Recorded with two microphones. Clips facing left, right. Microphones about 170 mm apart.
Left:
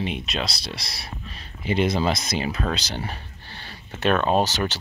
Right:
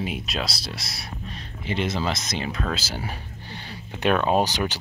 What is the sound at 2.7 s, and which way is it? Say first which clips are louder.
Speech: left 1 dB; 5° right (ahead or behind).